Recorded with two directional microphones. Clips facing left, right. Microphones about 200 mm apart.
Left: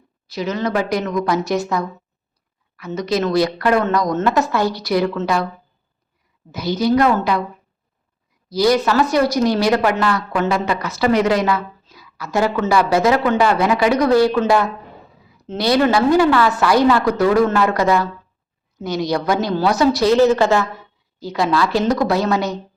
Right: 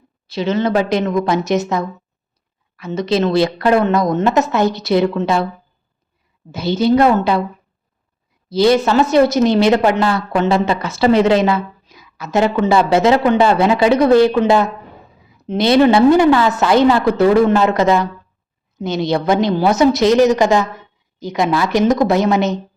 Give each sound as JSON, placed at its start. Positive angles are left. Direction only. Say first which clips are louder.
{"t": 0.3, "sound": "speech", "louder": "right 4 dB", "side_deg": -25}
{"t": 6.5, "sound": "speech", "louder": "right 3 dB", "side_deg": -25}
{"t": 8.4, "sound": "speech", "louder": "right 3 dB", "side_deg": -25}